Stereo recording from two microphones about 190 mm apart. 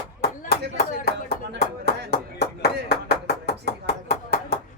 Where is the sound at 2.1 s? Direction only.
55° left (ahead or behind).